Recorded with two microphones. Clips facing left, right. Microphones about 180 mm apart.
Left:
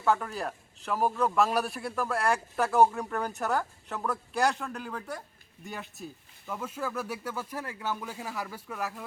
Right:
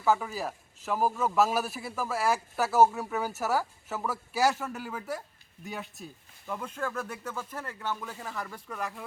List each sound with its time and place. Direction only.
0.0 s speech: 5° right (ahead or behind)